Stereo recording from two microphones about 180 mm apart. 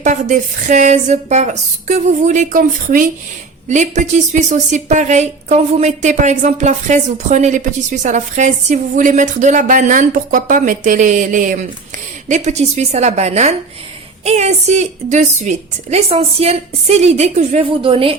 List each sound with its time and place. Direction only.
0.0 s a woman's voice: 45° right (ahead or behind)